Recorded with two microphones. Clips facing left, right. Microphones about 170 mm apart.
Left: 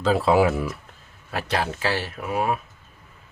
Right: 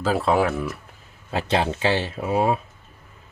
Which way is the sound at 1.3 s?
25° right (ahead or behind).